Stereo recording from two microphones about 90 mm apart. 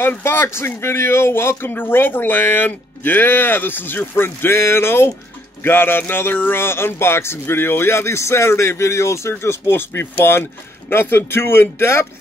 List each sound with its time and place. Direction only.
0.0 s speech: 25° left (ahead or behind)